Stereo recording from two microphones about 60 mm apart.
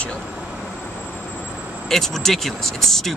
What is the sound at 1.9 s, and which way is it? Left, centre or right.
Speech, centre.